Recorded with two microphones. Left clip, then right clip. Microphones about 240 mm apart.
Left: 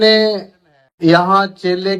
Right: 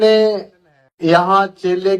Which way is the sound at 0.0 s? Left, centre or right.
Left.